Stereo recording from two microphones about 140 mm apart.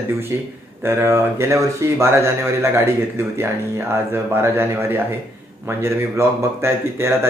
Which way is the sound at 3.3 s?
15° right (ahead or behind).